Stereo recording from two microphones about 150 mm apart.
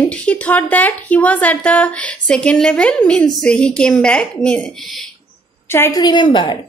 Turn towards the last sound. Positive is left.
turn(degrees=30)  # may be behind; listen again after turning